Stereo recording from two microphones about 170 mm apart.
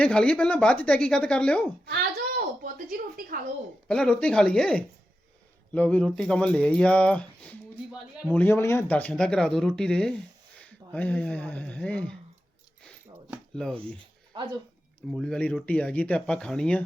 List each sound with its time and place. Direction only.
0.0 s speech: 5° left (ahead or behind)
2.4 s speech: 55° right (ahead or behind)
3.8 s speech: 5° left (ahead or behind)
13.6 s speech: 5° left (ahead or behind)
15.1 s speech: 5° left (ahead or behind)